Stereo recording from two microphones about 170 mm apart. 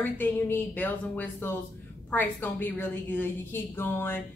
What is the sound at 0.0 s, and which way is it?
A woman's voice, 10° left (ahead or behind).